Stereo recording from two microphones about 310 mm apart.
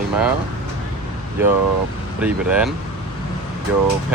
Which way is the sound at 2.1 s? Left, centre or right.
Centre.